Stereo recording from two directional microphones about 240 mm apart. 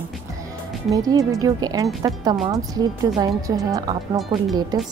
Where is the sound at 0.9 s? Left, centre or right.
Centre.